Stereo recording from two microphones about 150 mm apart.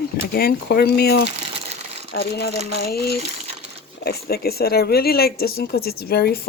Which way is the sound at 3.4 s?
45° right (ahead or behind).